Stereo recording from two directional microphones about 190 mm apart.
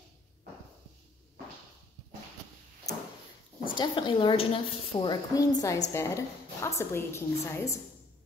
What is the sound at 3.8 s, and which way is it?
A woman's voice, 25° left (ahead or behind).